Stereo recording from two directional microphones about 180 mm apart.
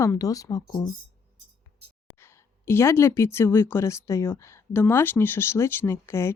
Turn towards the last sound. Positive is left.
turn(degrees=15)  # may be behind; listen again after turning